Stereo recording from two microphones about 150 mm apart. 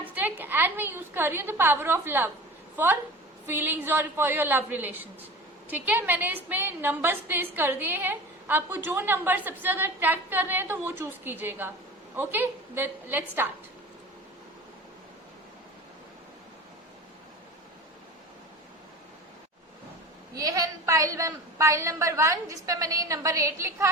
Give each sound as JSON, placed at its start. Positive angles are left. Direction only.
{"t": 0.0, "sound": "a woman's voice", "side_deg": -10}
{"t": 20.3, "sound": "a woman's voice", "side_deg": -25}